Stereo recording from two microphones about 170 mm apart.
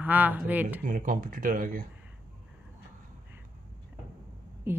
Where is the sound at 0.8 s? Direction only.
50° right (ahead or behind).